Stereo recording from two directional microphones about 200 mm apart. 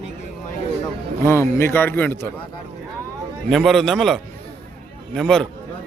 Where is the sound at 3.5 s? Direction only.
Centre (ahead or behind).